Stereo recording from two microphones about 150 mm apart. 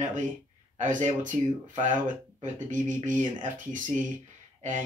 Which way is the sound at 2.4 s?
55° right (ahead or behind).